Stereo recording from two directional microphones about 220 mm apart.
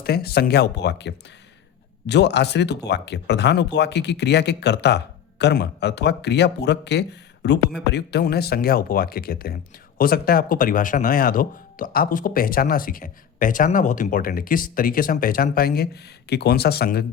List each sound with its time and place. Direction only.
0.0 s speech: 45° left (ahead or behind)